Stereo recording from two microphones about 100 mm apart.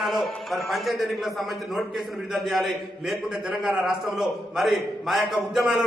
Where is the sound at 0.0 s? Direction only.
Centre (ahead or behind).